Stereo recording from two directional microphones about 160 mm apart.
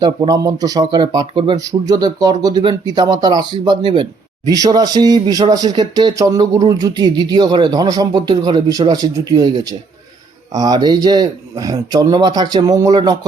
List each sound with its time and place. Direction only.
0.0 s speech: 25° right (ahead or behind)